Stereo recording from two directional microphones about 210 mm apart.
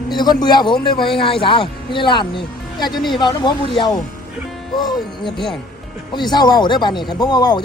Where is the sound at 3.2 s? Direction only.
20° left (ahead or behind).